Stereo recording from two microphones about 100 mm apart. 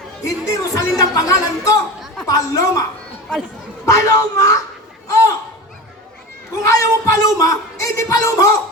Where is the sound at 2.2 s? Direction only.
35° left (ahead or behind).